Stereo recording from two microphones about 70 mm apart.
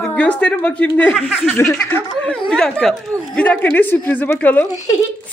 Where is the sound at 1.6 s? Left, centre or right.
Left.